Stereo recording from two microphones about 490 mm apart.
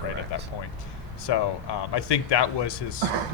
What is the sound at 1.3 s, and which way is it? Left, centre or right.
Speech, left.